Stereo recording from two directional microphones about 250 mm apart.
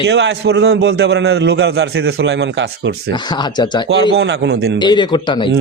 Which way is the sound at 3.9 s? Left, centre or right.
Right.